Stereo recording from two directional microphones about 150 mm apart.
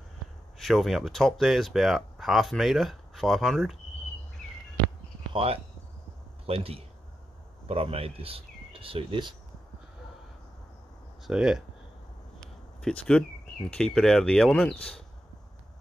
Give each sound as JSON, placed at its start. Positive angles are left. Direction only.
{"t": 0.6, "sound": "speech", "side_deg": 0}
{"t": 5.3, "sound": "speech", "side_deg": -40}
{"t": 11.2, "sound": "speech", "side_deg": -5}
{"t": 12.4, "sound": "a sound", "side_deg": 5}
{"t": 13.7, "sound": "speech", "side_deg": 5}